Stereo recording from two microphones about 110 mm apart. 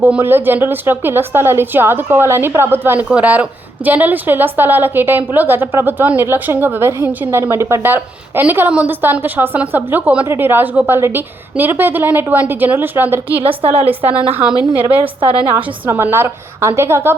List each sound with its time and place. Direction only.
0.0 s a woman's voice: 20° right (ahead or behind)
13.4 s a woman's voice: 60° right (ahead or behind)
13.7 s a woman's voice: 15° right (ahead or behind)